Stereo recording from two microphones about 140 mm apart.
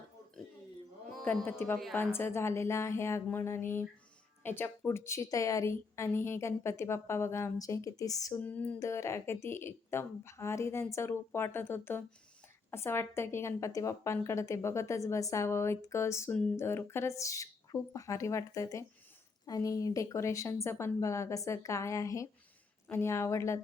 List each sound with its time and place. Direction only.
1.2 s a woman's voice: 10° left (ahead or behind)
8.4 s a woman's voice: 10° left (ahead or behind)